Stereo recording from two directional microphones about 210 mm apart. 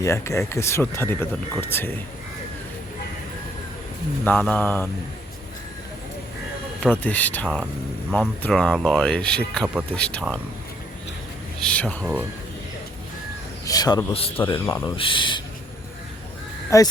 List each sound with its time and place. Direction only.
0.0 s speech: 15° left (ahead or behind)
4.2 s speech: 10° left (ahead or behind)
6.7 s speech: 5° left (ahead or behind)
11.6 s speech: 5° left (ahead or behind)
13.7 s speech: 20° left (ahead or behind)
16.6 s speech: 15° left (ahead or behind)